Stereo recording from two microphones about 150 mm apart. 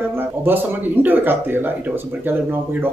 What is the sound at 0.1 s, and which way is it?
Speech, 15° right (ahead or behind).